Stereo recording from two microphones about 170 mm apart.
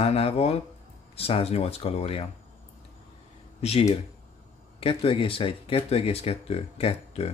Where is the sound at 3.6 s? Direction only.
40° left (ahead or behind).